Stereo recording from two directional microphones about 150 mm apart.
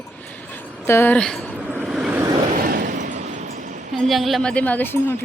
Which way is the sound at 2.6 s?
70° right (ahead or behind).